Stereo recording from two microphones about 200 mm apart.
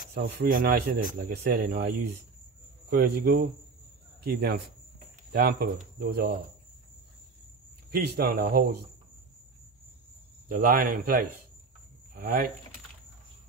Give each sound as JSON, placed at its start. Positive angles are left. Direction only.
{"t": 0.1, "sound": "speech", "side_deg": -50}
{"t": 7.9, "sound": "speech", "side_deg": -55}
{"t": 10.5, "sound": "speech", "side_deg": -45}